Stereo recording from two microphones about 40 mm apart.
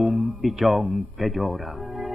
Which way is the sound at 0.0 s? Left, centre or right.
Centre.